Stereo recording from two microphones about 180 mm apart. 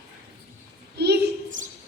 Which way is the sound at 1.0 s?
65° right (ahead or behind).